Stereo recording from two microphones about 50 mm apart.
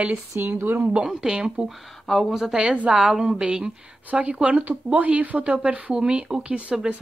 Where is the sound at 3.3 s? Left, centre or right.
Centre.